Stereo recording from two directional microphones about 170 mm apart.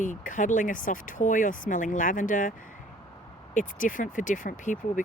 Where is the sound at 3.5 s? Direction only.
50° left (ahead or behind).